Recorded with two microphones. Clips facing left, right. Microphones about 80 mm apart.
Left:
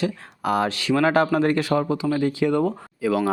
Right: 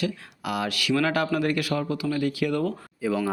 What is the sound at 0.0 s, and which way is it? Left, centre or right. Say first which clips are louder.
Speech: left 4 dB; left.